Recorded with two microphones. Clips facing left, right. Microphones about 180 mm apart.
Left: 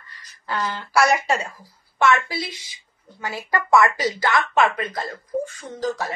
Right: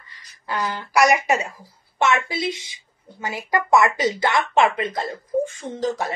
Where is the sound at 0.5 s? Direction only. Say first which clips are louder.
Right 1 dB; 15° right (ahead or behind).